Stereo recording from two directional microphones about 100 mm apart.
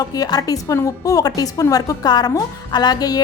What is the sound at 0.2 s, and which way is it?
Speech, 40° left (ahead or behind).